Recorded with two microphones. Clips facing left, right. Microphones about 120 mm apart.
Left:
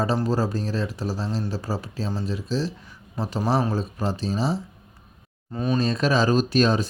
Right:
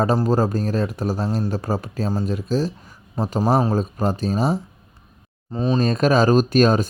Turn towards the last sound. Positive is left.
turn(degrees=-50)  # may be behind; listen again after turning